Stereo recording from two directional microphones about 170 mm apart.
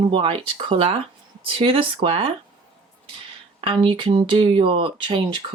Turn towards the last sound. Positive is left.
turn(degrees=-30)  # may be behind; listen again after turning